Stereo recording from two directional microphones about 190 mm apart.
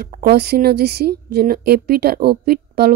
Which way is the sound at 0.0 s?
50° right (ahead or behind).